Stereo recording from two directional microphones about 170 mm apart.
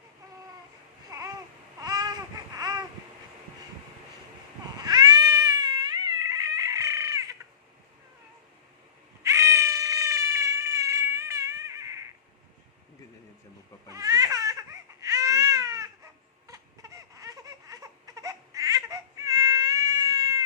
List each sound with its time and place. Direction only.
1.1 s babbling: 20° right (ahead or behind)
4.8 s cat: 20° right (ahead or behind)
9.2 s cat: 20° right (ahead or behind)
13.9 s baby cry: 20° right (ahead or behind)
16.5 s a sound: 20° right (ahead or behind)